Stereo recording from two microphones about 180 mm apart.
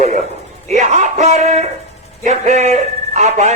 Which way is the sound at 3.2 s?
40° right (ahead or behind).